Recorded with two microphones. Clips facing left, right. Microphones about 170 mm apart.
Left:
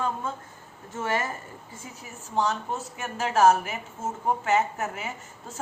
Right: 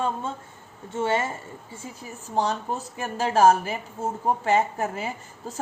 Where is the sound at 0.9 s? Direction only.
25° right (ahead or behind).